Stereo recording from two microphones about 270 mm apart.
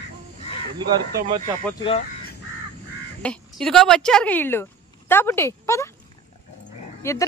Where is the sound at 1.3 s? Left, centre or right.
Centre.